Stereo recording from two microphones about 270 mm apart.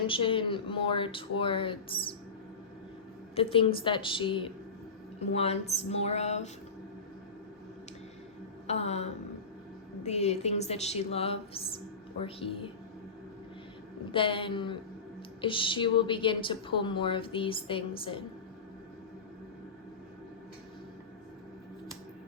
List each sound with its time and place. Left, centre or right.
0.1 s a woman's voice: centre
3.3 s a woman's voice: centre
8.6 s a woman's voice: left
14.1 s a woman's voice: centre